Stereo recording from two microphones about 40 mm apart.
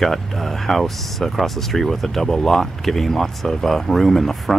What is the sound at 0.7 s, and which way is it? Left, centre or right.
Speech, centre.